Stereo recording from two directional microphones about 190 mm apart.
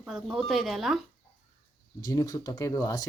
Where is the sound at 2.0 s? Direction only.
20° left (ahead or behind).